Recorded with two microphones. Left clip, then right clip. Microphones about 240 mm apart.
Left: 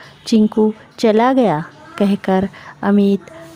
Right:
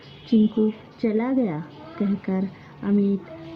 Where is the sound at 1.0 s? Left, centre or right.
Left.